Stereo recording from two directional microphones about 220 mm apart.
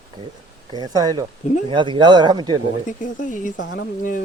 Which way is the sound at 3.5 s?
55° left (ahead or behind).